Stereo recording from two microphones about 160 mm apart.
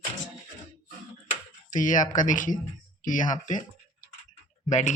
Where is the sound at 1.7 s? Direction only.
55° left (ahead or behind).